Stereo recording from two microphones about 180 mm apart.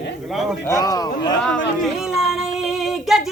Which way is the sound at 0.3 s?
Centre (ahead or behind).